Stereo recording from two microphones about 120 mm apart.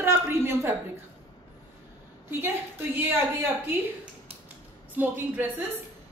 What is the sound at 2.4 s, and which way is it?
A woman's voice, 20° right (ahead or behind).